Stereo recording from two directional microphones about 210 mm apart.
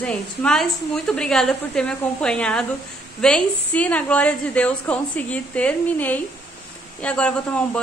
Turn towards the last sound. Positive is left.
turn(degrees=5)  # may be behind; listen again after turning